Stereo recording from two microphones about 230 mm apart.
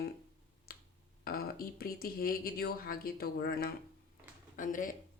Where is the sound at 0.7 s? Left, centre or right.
Left.